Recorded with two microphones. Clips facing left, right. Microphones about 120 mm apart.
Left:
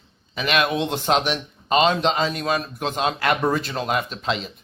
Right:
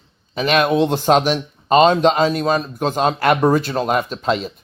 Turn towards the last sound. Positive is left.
turn(degrees=-45)  # may be behind; listen again after turning